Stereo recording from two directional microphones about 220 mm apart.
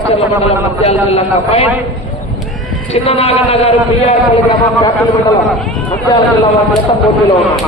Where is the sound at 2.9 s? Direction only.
25° left (ahead or behind).